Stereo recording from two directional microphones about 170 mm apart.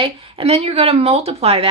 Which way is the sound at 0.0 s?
30° right (ahead or behind).